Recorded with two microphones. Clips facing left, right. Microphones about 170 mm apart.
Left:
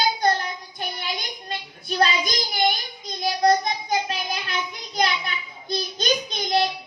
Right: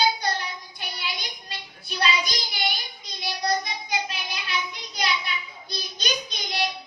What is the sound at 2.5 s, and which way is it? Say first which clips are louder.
Child singing: left 8 dB; 50° left (ahead or behind).